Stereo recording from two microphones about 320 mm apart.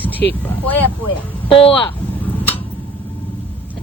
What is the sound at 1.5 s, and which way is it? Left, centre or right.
Speech, centre.